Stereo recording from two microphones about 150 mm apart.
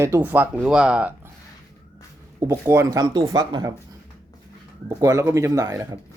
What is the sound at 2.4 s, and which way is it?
Speech, 20° right (ahead or behind).